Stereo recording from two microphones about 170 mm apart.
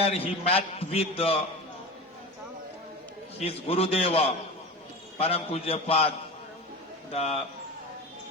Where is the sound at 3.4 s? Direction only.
35° left (ahead or behind).